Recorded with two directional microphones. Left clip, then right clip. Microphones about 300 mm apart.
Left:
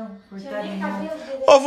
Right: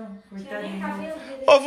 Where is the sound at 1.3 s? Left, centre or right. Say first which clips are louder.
Left 3 dB; centre.